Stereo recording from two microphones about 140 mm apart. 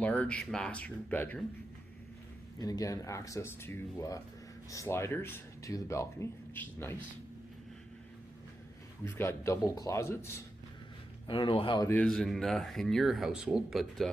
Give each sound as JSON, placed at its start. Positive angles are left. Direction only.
{"t": 0.0, "sound": "speech", "side_deg": 10}
{"t": 2.6, "sound": "speech", "side_deg": 25}
{"t": 9.0, "sound": "speech", "side_deg": 15}
{"t": 11.2, "sound": "speech", "side_deg": 40}
{"t": 11.9, "sound": "speech", "side_deg": 5}